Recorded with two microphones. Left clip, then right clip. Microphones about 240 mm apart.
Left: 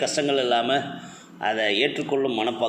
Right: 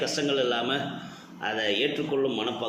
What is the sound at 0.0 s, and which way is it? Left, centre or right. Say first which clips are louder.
Speech: left 3 dB; left.